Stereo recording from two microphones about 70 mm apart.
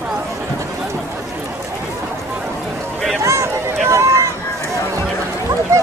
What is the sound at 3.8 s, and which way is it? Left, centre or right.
Run, right.